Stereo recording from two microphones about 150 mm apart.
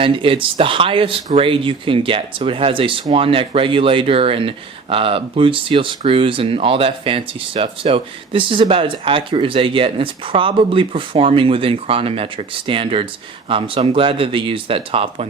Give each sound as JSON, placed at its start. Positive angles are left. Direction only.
{"t": 0.0, "sound": "speech", "side_deg": -35}